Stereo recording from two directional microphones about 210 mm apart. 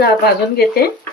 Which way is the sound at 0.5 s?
45° left (ahead or behind).